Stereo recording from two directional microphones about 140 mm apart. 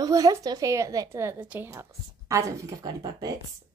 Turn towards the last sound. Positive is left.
turn(degrees=-30)  # may be behind; listen again after turning